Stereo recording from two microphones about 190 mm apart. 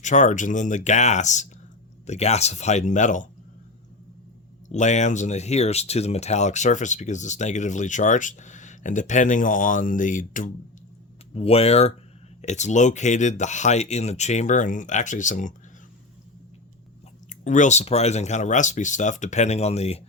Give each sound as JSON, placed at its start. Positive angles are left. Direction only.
{"t": 0.0, "sound": "speech", "side_deg": 40}
{"t": 4.7, "sound": "speech", "side_deg": 40}
{"t": 11.3, "sound": "speech", "side_deg": 30}
{"t": 17.2, "sound": "speech", "side_deg": 40}